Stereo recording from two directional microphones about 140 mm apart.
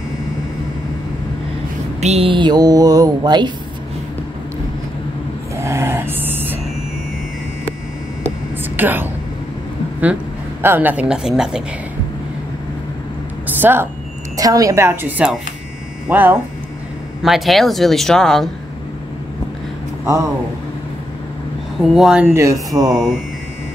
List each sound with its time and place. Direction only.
2.0 s speech: 50° right (ahead or behind); by 3.5 s 30° right (ahead or behind)
5.6 s a sound: 20° right (ahead or behind)
8.7 s a woman's voice: 15° right (ahead or behind)
10.6 s a woman's voice: 15° right (ahead or behind)
13.6 s a woman's voice: 15° right (ahead or behind)
17.2 s speech: centre (ahead or behind)
21.9 s speech: 5° right (ahead or behind)
22.3 s speech: 20° right (ahead or behind)